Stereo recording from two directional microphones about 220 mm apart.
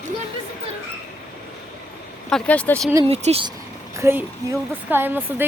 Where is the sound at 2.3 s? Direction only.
5° left (ahead or behind).